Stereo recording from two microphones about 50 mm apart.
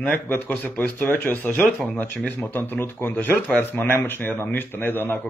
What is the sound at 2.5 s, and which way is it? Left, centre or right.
Speech, left.